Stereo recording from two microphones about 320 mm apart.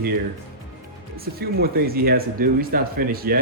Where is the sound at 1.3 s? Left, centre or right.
Right.